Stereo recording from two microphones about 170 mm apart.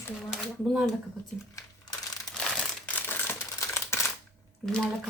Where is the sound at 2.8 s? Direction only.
10° left (ahead or behind).